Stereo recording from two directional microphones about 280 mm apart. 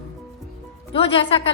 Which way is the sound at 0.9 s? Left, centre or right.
Centre.